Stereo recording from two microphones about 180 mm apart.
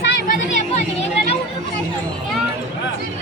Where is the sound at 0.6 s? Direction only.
40° left (ahead or behind).